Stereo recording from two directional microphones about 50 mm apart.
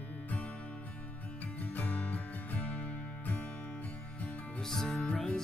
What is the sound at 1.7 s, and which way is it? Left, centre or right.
Music, left.